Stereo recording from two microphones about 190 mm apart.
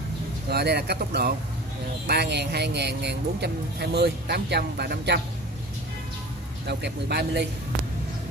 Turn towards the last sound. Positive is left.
turn(degrees=-60)  # may be behind; listen again after turning